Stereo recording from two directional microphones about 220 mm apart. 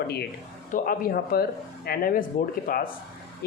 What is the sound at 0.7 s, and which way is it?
Speech, 40° left (ahead or behind).